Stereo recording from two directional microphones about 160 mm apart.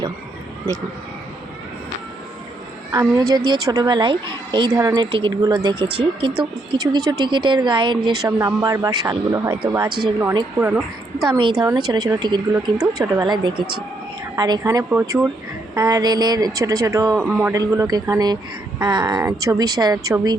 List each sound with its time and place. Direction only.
2.9 s speech: 20° right (ahead or behind)
10.6 s a woman's voice: 10° right (ahead or behind)
11.3 s a woman's voice: 30° right (ahead or behind)